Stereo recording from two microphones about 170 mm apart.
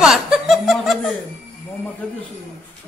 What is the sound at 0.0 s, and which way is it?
Music, 5° right (ahead or behind).